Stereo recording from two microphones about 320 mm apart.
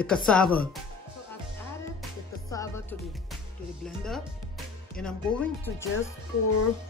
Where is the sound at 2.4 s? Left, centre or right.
Centre.